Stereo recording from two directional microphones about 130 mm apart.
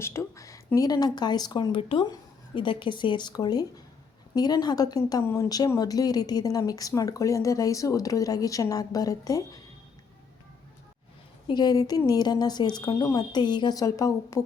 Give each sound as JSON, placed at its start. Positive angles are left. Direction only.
{"t": 0.0, "sound": "a woman's voice", "side_deg": 25}
{"t": 11.4, "sound": "a woman's voice", "side_deg": 35}